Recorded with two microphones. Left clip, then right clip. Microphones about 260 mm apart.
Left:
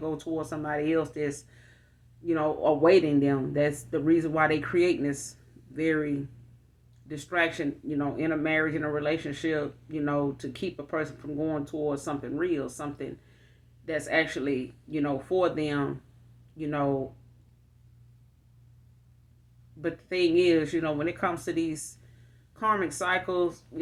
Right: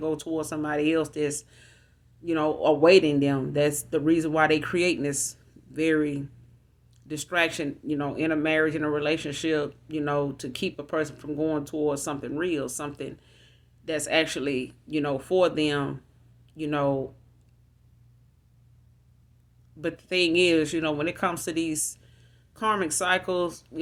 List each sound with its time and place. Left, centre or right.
0.0 s speech: right
7.1 s speech: right
19.8 s speech: right